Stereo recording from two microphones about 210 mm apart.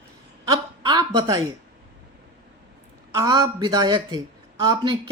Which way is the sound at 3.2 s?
20° right (ahead or behind).